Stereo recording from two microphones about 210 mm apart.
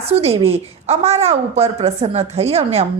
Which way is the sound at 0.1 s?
30° right (ahead or behind).